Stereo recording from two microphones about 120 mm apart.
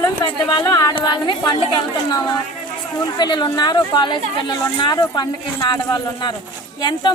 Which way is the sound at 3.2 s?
40° left (ahead or behind).